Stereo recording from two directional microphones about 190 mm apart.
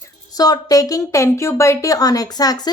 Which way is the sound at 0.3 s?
20° left (ahead or behind).